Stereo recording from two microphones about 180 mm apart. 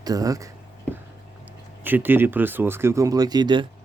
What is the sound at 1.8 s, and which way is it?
Speech, 10° right (ahead or behind).